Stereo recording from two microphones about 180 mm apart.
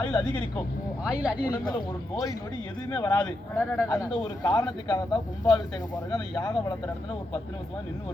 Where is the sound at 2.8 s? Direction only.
20° left (ahead or behind).